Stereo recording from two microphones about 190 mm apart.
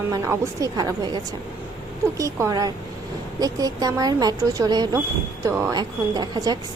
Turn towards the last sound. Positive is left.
turn(degrees=-20)  # may be behind; listen again after turning